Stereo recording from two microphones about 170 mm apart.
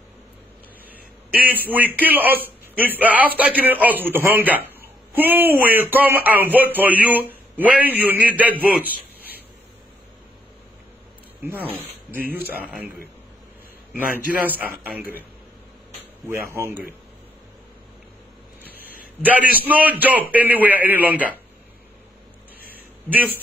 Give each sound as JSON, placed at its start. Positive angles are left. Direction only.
{"t": 1.7, "sound": "speech", "side_deg": -10}
{"t": 11.4, "sound": "speech", "side_deg": -10}
{"t": 14.2, "sound": "speech", "side_deg": -10}
{"t": 16.3, "sound": "speech", "side_deg": -15}
{"t": 18.8, "sound": "a sound", "side_deg": 60}
{"t": 19.2, "sound": "speech", "side_deg": -10}
{"t": 23.0, "sound": "a man's voice", "side_deg": -10}